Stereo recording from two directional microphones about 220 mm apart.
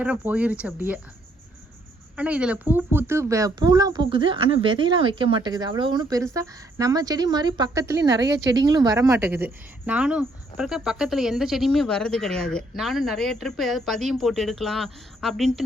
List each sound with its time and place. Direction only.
0.0 s a woman's voice: 5° right (ahead or behind)
2.1 s a woman's voice: 5° right (ahead or behind)